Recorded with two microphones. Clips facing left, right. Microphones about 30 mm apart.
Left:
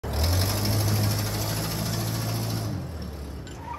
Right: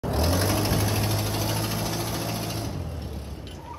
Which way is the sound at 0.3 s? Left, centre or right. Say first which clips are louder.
Right 3 dB; right.